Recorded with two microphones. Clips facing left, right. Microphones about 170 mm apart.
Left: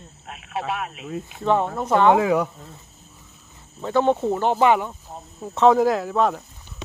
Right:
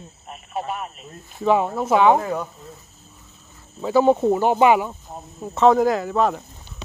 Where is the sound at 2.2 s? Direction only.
90° left.